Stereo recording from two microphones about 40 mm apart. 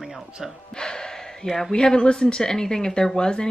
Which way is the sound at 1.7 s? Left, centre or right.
Left.